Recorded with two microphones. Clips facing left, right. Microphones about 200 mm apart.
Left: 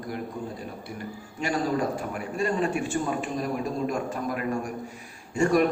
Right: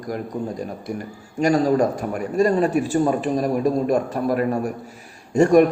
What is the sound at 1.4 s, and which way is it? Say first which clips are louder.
A man's voice: right 9 dB; 40° right (ahead or behind).